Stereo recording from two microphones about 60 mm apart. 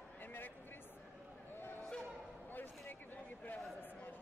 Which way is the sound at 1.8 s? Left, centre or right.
Centre.